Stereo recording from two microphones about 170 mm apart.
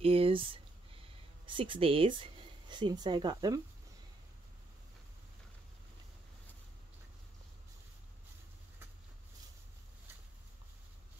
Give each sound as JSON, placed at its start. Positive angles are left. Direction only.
{"t": 0.0, "sound": "speech", "side_deg": -35}